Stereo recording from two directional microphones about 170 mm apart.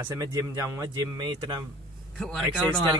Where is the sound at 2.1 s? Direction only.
Centre (ahead or behind).